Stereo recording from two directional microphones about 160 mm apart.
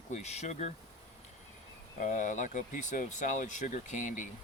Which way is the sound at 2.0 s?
50° left (ahead or behind).